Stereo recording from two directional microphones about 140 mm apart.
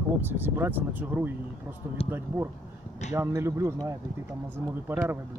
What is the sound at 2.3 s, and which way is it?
Speech, 15° right (ahead or behind).